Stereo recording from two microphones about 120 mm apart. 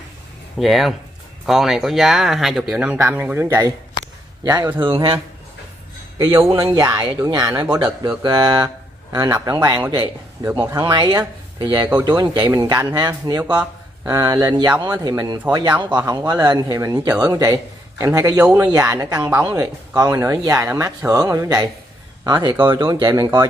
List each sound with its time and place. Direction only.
0.6 s speech: centre (ahead or behind)
2.8 s speech: 15° right (ahead or behind)
4.4 s a man's voice: 30° right (ahead or behind)
4.7 s a man's voice: 45° right (ahead or behind)
6.5 s a man's voice: 25° right (ahead or behind)
18.4 s speech: 15° right (ahead or behind)
18.7 s speech: 25° right (ahead or behind)